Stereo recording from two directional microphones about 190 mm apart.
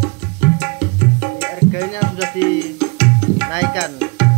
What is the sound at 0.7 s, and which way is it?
Music, 40° left (ahead or behind).